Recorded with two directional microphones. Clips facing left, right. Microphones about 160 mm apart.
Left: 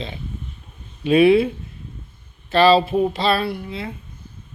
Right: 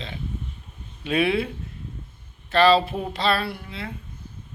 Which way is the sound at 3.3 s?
20° left (ahead or behind).